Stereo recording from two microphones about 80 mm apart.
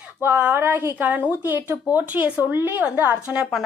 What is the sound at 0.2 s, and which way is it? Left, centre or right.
A woman's voice, right.